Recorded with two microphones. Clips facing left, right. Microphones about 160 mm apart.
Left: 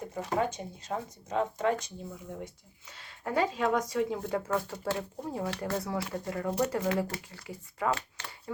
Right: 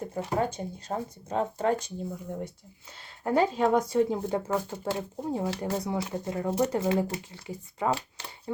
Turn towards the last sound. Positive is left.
turn(degrees=-25)  # may be behind; listen again after turning